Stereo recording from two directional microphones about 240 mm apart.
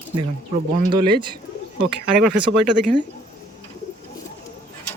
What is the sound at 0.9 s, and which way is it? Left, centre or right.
Speech, centre.